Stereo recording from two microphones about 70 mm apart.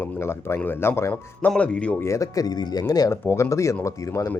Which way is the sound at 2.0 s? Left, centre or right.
Left.